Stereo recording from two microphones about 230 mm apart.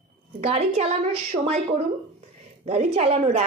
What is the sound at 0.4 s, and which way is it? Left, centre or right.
Speech, right.